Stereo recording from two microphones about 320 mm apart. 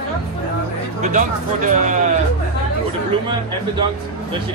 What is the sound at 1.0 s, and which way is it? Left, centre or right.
Speech, right.